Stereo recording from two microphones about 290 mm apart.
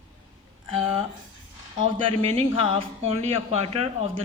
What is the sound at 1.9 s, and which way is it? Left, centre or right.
Speech, centre.